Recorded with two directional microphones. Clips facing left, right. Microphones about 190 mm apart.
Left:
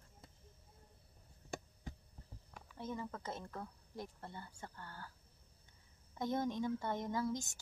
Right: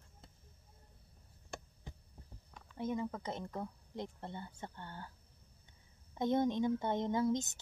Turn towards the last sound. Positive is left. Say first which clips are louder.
# right 6 dB
turn(degrees=-20)  # may be behind; listen again after turning